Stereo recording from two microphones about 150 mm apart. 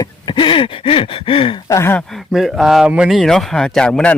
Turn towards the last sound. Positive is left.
turn(degrees=5)  # may be behind; listen again after turning